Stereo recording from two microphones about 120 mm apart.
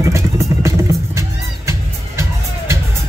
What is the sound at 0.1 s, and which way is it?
Music, 25° right (ahead or behind).